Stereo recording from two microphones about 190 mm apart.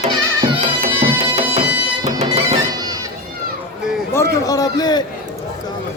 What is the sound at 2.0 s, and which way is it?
Music, 35° right (ahead or behind).